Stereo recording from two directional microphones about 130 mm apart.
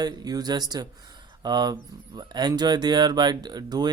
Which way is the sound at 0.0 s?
30° right (ahead or behind).